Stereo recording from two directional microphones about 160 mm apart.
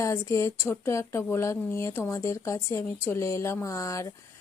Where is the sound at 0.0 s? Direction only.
20° left (ahead or behind).